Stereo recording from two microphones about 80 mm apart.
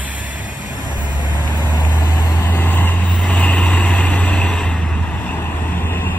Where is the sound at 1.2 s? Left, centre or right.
Left.